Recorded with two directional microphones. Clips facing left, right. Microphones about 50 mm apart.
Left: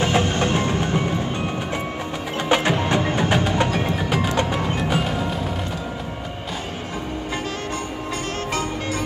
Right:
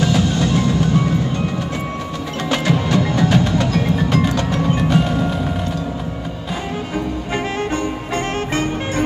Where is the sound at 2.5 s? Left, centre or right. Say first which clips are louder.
Right 1 dB; left.